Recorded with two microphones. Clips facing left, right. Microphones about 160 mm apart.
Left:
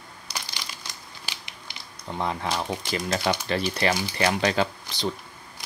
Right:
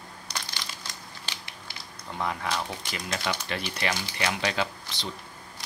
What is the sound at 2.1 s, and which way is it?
Speech, 30° left (ahead or behind).